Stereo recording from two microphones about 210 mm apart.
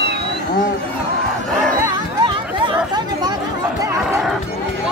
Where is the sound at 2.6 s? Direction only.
20° right (ahead or behind).